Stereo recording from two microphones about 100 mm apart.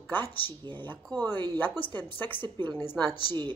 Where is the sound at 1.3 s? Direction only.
45° right (ahead or behind).